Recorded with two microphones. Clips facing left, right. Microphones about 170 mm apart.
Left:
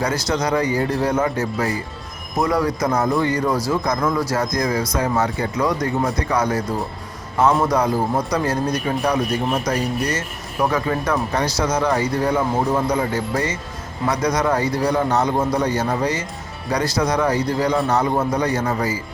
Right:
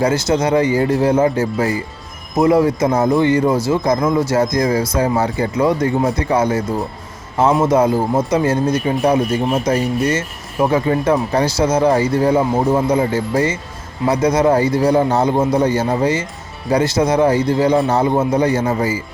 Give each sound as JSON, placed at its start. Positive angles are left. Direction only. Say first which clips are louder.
{"t": 0.0, "sound": "speech", "louder": "right 6 dB", "side_deg": -25}
{"t": 7.6, "sound": "speech", "louder": "right 5 dB", "side_deg": -25}